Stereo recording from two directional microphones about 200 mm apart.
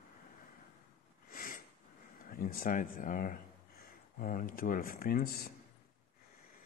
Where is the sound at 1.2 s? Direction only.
45° left (ahead or behind).